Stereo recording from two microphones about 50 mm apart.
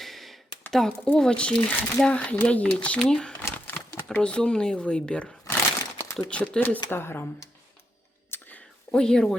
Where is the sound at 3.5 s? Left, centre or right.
Left.